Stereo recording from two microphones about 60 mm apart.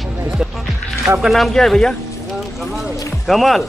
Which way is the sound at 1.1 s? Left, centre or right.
Centre.